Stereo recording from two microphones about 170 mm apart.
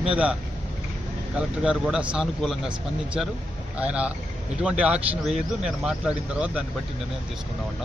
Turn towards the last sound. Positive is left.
turn(degrees=-5)  # may be behind; listen again after turning